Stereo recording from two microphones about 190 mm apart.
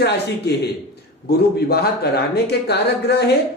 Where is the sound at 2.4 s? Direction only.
60° left (ahead or behind).